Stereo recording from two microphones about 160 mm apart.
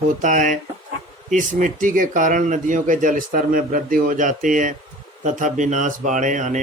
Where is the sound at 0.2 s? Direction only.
55° right (ahead or behind).